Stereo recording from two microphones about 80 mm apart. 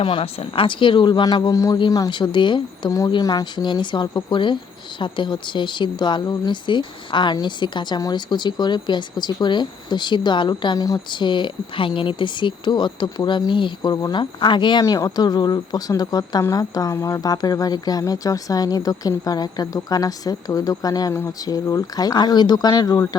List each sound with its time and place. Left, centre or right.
0.0 s speech: left
2.0 s speech: left
3.1 s speech: left
10.8 s speech: left
11.1 s speech: left
13.9 s speech: left
14.2 s speech: left
14.8 s speech: left
21.1 s speech: left
21.4 s speech: left
22.7 s speech: left